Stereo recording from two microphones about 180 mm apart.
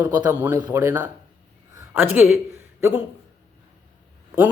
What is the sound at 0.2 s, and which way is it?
A man's voice, 10° right (ahead or behind).